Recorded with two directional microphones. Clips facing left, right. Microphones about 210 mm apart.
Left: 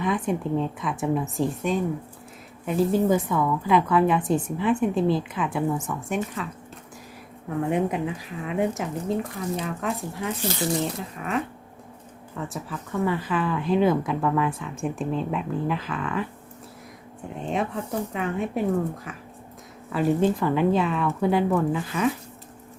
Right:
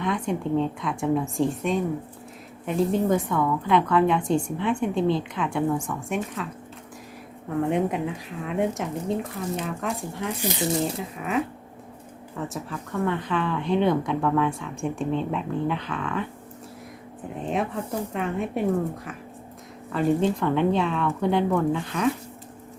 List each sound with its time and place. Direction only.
0.0 s speech: 5° left (ahead or behind)
7.5 s speech: centre (ahead or behind)
10.4 s speech: 20° right (ahead or behind)
11.0 s speech: centre (ahead or behind)
17.3 s speech: centre (ahead or behind)
19.9 s speech: 5° left (ahead or behind)